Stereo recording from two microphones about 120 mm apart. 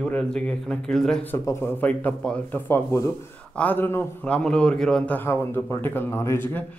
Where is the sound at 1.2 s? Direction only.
25° left (ahead or behind).